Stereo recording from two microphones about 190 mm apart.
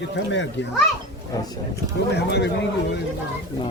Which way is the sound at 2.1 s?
65° left (ahead or behind).